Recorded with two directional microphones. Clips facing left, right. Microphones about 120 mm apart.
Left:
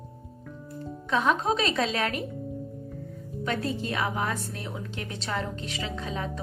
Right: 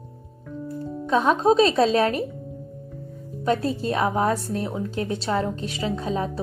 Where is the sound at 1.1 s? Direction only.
30° right (ahead or behind).